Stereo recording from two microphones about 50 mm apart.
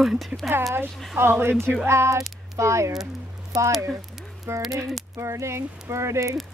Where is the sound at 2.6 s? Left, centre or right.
Right.